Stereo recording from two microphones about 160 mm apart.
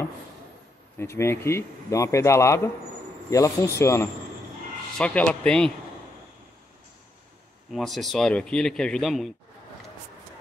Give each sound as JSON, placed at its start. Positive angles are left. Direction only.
{"t": 0.9, "sound": "a man's voice", "side_deg": 15}
{"t": 7.7, "sound": "a man's voice", "side_deg": 0}